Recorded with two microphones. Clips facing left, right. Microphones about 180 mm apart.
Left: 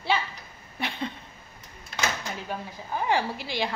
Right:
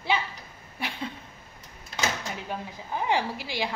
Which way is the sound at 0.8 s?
10° right (ahead or behind).